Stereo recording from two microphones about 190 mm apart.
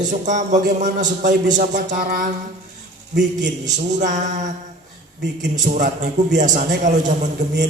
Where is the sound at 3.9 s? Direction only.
40° right (ahead or behind).